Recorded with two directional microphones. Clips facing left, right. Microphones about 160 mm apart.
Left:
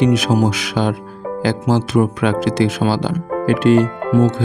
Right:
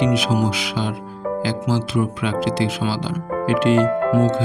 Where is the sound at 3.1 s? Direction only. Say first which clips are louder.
Left 2 dB; 40° left (ahead or behind).